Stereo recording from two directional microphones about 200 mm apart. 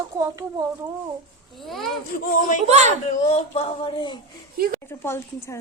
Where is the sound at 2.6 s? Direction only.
35° right (ahead or behind).